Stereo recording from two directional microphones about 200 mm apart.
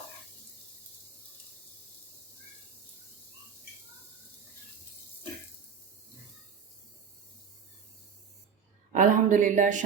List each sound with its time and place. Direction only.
8.9 s speech: 40° right (ahead or behind)